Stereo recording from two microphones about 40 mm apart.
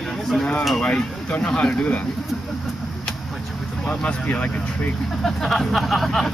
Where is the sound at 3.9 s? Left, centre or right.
Left.